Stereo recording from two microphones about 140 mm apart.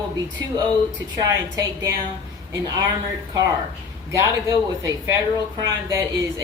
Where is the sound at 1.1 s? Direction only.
25° right (ahead or behind).